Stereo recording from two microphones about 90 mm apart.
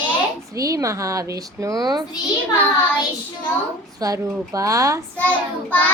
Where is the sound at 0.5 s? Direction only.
40° right (ahead or behind).